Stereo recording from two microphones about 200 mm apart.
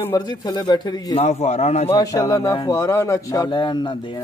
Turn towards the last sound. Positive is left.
turn(degrees=25)  # may be behind; listen again after turning